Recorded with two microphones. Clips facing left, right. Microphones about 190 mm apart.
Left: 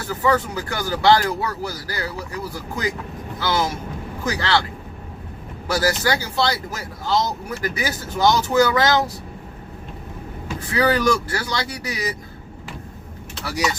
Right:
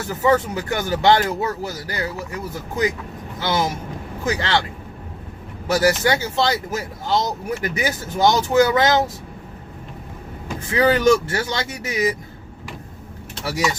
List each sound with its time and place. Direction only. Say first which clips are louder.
0.1 s speech: right 2 dB; 20° right (ahead or behind)
5.6 s speech: right 3 dB; 20° right (ahead or behind)
10.7 s speech: right 3 dB; 25° right (ahead or behind)